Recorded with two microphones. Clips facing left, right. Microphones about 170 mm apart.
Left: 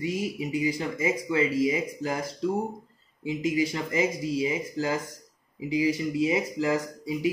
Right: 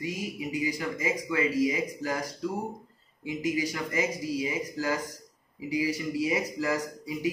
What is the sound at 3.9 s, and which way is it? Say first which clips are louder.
Speech: left 3 dB; 20° left (ahead or behind).